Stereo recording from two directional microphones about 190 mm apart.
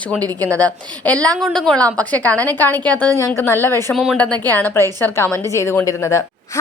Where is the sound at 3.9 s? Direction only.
Centre (ahead or behind).